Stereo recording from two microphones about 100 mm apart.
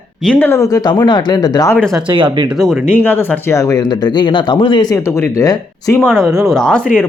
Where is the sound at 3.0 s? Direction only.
20° left (ahead or behind).